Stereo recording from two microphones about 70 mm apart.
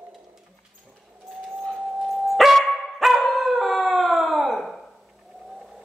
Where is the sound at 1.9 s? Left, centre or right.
Centre.